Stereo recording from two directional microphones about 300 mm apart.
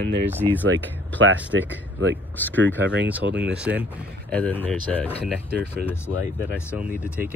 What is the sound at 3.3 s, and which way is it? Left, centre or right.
Speech, centre.